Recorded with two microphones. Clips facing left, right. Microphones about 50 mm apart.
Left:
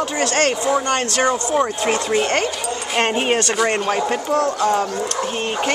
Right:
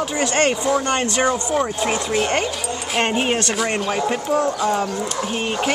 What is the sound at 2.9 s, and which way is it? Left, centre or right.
Speech, centre.